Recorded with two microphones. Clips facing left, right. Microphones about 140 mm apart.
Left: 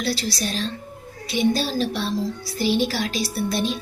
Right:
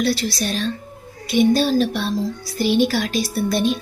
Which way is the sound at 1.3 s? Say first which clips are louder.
Right 6 dB; 55° right (ahead or behind).